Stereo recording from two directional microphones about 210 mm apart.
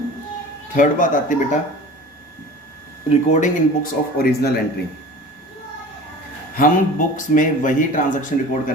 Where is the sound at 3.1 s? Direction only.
35° left (ahead or behind).